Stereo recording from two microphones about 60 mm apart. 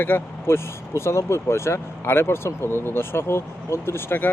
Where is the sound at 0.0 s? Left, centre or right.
Left.